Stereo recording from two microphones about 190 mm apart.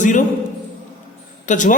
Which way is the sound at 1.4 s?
40° left (ahead or behind).